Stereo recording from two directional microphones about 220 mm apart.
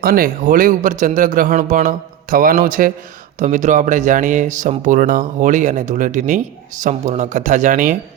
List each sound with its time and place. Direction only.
0.0 s speech: 45° right (ahead or behind)